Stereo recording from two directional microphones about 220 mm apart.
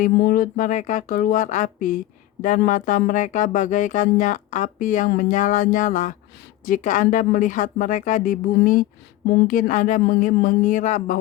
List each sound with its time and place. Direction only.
0.0 s speech: 40° left (ahead or behind)